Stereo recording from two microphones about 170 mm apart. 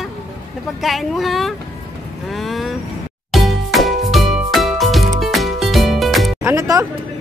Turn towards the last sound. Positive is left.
turn(degrees=-20)  # may be behind; listen again after turning